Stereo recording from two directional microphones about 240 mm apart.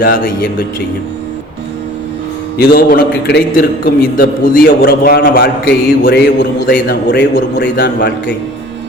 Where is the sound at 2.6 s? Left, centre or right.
Left.